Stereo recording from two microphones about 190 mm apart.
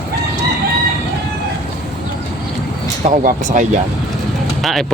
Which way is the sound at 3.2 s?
40° right (ahead or behind).